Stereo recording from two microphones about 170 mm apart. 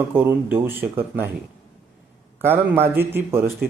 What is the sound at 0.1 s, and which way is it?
Speech, 10° right (ahead or behind).